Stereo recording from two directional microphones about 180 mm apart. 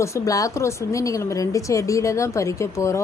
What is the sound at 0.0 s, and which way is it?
A woman's voice, 15° left (ahead or behind).